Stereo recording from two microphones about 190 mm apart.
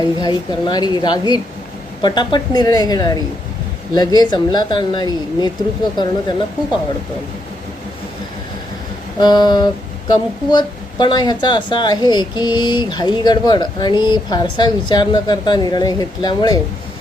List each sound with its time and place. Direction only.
0.0 s speech: 20° left (ahead or behind)
9.2 s speech: 20° left (ahead or behind)